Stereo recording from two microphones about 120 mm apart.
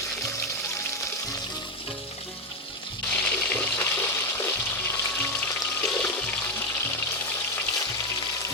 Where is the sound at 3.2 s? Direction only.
15° left (ahead or behind).